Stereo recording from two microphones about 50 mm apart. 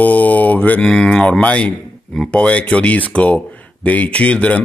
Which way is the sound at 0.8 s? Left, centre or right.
Centre.